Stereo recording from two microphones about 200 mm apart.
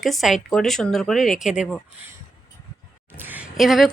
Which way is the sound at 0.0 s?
Centre (ahead or behind).